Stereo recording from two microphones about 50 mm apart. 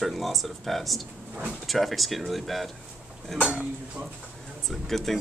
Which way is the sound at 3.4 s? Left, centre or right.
Centre.